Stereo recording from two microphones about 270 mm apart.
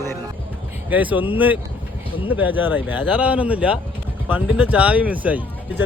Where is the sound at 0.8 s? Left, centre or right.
Centre.